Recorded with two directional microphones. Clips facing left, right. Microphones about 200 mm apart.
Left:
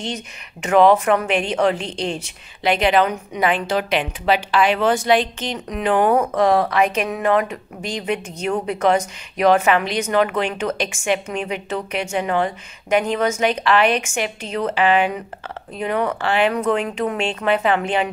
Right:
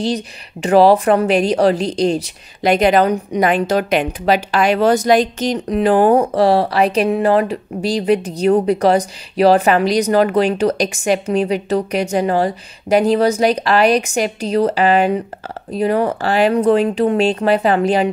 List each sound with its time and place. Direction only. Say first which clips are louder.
0.0 s a woman's voice: right 9 dB; 35° right (ahead or behind)